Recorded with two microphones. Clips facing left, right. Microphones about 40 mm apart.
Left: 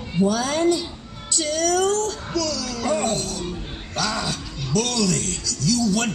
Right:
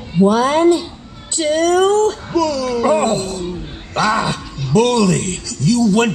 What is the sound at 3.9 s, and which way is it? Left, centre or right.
A woman's voice, right.